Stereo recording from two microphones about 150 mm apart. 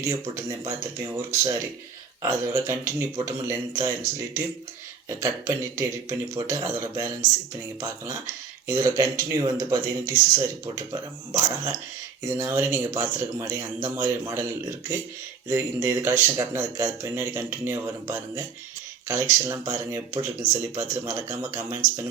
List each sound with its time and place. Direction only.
0.0 s speech: 15° right (ahead or behind)
2.2 s speech: 15° right (ahead or behind)
12.4 s speech: 15° right (ahead or behind)